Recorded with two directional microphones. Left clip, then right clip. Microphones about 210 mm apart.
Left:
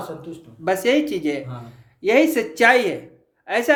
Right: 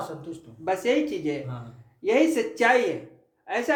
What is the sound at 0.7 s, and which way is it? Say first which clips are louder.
Speech: left 5 dB; 45° left (ahead or behind).